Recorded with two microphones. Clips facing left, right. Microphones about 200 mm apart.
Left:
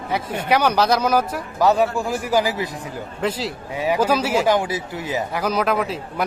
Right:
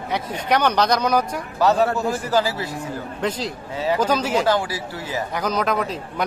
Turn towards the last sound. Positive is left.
turn(degrees=5)  # may be behind; listen again after turning